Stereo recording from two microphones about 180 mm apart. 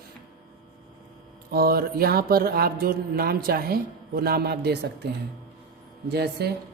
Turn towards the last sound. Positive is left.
turn(degrees=-65)  # may be behind; listen again after turning